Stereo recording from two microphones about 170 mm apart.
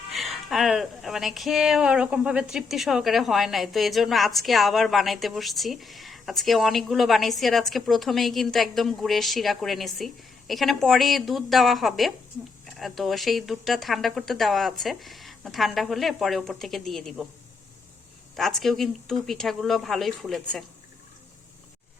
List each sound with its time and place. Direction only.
0.1 s speech: centre (ahead or behind)
18.3 s speech: centre (ahead or behind)